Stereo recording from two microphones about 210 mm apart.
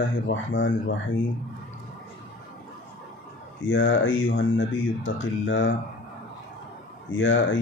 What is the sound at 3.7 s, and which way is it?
Speech, 65° left (ahead or behind).